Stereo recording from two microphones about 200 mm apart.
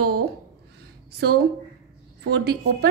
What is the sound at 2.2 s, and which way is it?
Speech, 55° right (ahead or behind).